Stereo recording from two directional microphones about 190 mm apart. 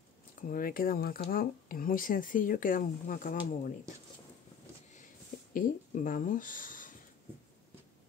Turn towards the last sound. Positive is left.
turn(degrees=45)  # may be behind; listen again after turning